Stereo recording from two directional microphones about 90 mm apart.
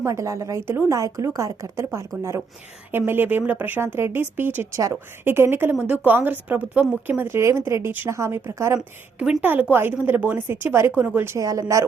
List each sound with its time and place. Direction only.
0.0 s a woman's voice: 35° right (ahead or behind)
9.4 s a woman's voice: 20° right (ahead or behind)
11.3 s speech: 40° right (ahead or behind)